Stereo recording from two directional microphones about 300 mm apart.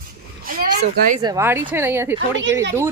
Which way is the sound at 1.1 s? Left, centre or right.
Centre.